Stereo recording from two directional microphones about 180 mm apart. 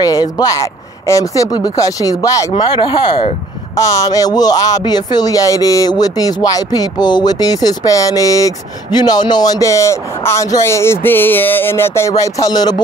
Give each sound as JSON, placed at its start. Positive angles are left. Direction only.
{"t": 0.0, "sound": "speech", "side_deg": 20}